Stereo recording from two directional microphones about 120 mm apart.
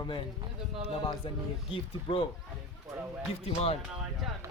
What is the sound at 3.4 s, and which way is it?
Speech, 55° left (ahead or behind).